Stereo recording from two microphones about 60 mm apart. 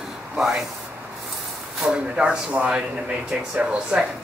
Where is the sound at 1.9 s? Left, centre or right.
Centre.